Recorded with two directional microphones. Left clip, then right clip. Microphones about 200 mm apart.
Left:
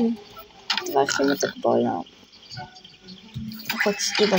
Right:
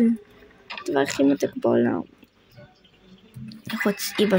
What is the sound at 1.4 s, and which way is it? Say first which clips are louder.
Speech: even; 70° right (ahead or behind).